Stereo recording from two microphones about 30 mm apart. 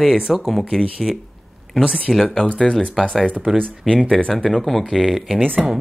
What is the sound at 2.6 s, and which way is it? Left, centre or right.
Speech, left.